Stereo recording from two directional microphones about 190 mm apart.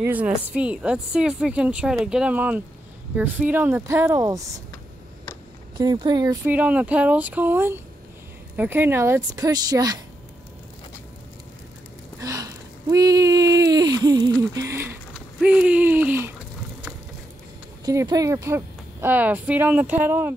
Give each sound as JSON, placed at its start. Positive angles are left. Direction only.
{"t": 0.0, "sound": "speech", "side_deg": -10}
{"t": 5.8, "sound": "speech", "side_deg": -20}
{"t": 6.4, "sound": "speech", "side_deg": -10}
{"t": 12.2, "sound": "a sound", "side_deg": -15}
{"t": 17.8, "sound": "speech", "side_deg": -20}